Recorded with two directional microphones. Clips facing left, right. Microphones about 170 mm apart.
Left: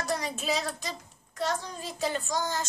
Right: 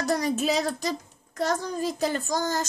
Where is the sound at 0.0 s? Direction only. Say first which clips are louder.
Right 7 dB; 45° right (ahead or behind).